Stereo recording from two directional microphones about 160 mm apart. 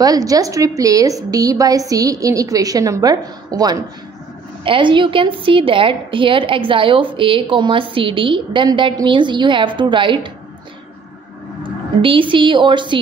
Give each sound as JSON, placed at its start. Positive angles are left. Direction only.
{"t": 0.0, "sound": "a woman's voice", "side_deg": -20}
{"t": 11.6, "sound": "speech", "side_deg": -30}